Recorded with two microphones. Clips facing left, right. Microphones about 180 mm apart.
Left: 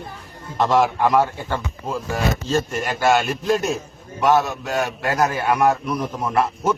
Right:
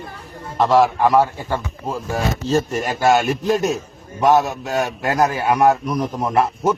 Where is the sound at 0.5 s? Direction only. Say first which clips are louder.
Right 3 dB; centre (ahead or behind).